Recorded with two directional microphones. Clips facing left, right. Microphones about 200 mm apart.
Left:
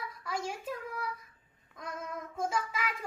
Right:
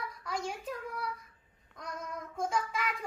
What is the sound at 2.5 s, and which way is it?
Speech, 5° left (ahead or behind).